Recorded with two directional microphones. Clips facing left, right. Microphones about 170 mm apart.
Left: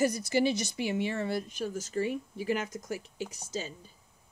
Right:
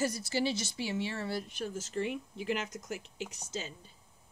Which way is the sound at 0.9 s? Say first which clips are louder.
Left 4 dB; 55° left (ahead or behind).